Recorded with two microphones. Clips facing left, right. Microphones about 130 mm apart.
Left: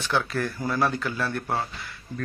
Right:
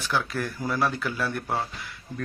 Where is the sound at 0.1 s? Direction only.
10° right (ahead or behind).